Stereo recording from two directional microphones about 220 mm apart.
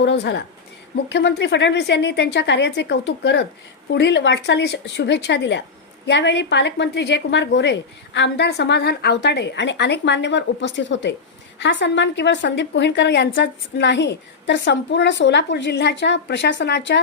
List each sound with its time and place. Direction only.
0.0 s a woman's voice: 55° left (ahead or behind)